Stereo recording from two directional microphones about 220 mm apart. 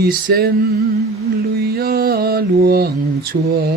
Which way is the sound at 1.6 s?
45° right (ahead or behind).